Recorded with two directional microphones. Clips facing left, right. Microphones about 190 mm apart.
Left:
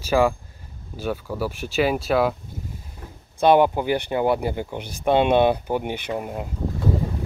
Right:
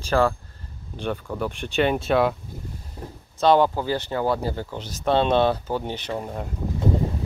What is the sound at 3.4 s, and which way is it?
Speech, 15° left (ahead or behind).